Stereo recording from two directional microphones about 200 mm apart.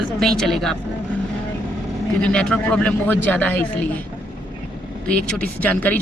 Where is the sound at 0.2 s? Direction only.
Centre (ahead or behind).